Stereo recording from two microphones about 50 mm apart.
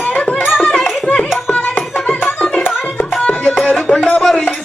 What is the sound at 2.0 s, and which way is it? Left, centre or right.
Music, left.